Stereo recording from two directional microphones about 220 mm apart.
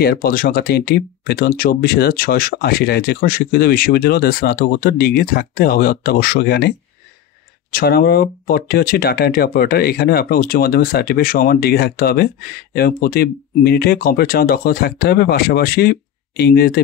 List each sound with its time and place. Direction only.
0.0 s speech: 45° left (ahead or behind)
7.7 s speech: 45° left (ahead or behind)